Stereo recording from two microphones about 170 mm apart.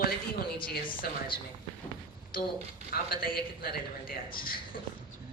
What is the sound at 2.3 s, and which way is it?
A man's voice, 60° left (ahead or behind).